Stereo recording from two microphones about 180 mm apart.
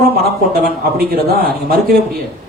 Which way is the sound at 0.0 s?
55° right (ahead or behind).